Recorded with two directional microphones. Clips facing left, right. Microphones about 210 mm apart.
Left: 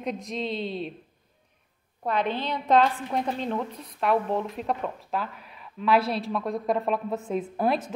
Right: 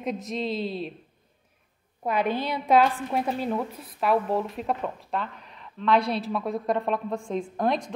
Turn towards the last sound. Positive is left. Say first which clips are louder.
# even
turn(degrees=5)  # may be behind; listen again after turning